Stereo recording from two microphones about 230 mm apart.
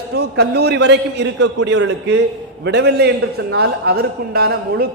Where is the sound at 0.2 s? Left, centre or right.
Right.